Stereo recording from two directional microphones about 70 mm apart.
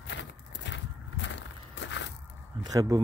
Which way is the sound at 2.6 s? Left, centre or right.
Right.